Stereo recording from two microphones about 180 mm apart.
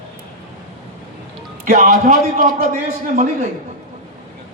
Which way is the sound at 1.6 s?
45° right (ahead or behind).